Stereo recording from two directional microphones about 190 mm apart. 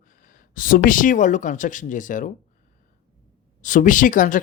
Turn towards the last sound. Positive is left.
turn(degrees=45)  # may be behind; listen again after turning